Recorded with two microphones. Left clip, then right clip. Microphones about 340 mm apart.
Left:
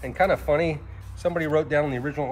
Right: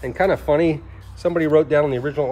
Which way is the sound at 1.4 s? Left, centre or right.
Right.